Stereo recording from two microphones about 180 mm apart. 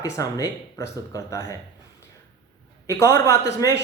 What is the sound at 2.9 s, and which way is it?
Speech, 15° left (ahead or behind).